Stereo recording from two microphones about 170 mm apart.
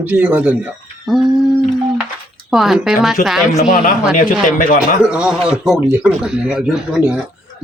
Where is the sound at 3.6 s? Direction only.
50° left (ahead or behind).